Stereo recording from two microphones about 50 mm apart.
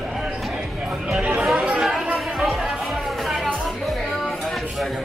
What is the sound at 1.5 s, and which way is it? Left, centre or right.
Chatter, centre.